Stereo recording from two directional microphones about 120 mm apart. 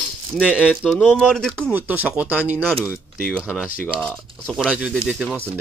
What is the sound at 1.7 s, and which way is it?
Speech, 15° right (ahead or behind).